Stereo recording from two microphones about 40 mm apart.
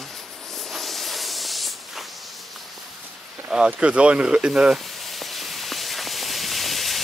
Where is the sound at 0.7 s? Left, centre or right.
Centre.